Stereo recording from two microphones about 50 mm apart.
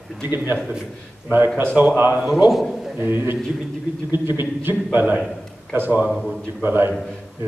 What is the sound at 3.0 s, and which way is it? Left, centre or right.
A man's voice, right.